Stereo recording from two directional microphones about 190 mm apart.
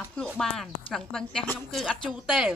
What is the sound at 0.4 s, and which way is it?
Speech, 5° left (ahead or behind).